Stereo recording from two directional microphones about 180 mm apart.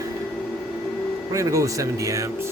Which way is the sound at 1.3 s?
15° right (ahead or behind).